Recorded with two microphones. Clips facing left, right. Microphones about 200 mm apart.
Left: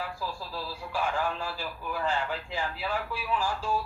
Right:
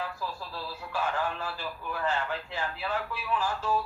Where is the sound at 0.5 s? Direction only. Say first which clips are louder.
Left 1 dB; 10° left (ahead or behind).